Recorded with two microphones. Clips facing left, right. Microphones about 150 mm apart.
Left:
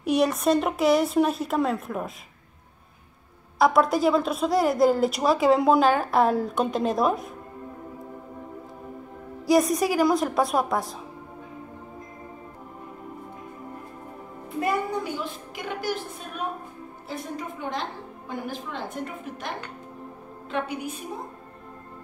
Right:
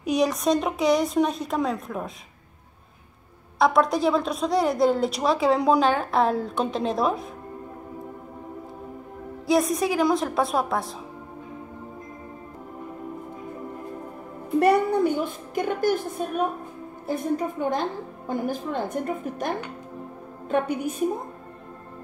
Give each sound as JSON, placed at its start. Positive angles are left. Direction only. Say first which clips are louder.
{"t": 0.0, "sound": "speech", "louder": "even", "side_deg": 5}
{"t": 3.5, "sound": "speech", "louder": "even", "side_deg": 0}
{"t": 9.5, "sound": "speech", "louder": "left 1 dB", "side_deg": 0}
{"t": 14.6, "sound": "a child's voice", "louder": "right 7 dB", "side_deg": -75}
{"t": 15.1, "sound": "a woman's voice", "louder": "right 7 dB", "side_deg": -50}
{"t": 17.1, "sound": "a woman's voice", "louder": "right 8 dB", "side_deg": -45}